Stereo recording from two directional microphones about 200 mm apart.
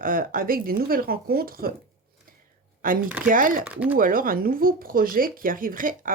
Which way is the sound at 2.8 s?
45° right (ahead or behind).